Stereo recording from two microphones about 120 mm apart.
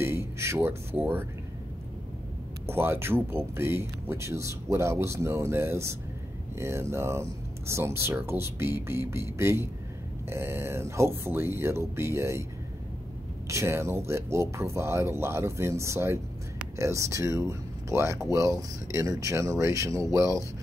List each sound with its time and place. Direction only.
0.0 s speech: 20° right (ahead or behind)
2.6 s speech: 20° right (ahead or behind)
13.5 s speech: 20° right (ahead or behind)